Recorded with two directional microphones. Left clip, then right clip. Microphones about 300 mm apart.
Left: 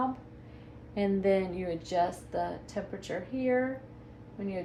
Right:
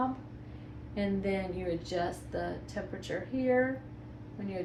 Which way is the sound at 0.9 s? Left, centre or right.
Left.